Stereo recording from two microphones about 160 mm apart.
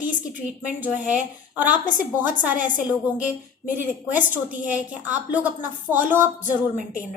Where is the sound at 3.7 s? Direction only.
10° right (ahead or behind).